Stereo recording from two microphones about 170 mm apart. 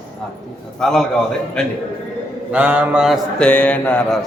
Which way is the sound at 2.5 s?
10° right (ahead or behind).